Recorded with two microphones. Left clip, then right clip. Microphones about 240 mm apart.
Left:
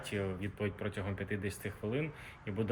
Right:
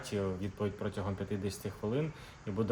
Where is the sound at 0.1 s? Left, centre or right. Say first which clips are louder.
Right 2 dB; centre.